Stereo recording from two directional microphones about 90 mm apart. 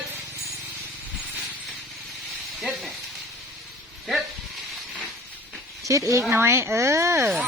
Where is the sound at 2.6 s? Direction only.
Centre (ahead or behind).